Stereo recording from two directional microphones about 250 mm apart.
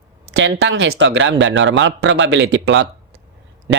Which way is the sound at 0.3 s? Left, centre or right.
Right.